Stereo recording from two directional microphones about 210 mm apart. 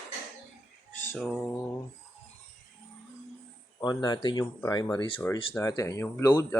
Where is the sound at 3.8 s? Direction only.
20° left (ahead or behind).